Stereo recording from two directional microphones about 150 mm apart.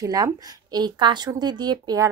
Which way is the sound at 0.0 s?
25° right (ahead or behind).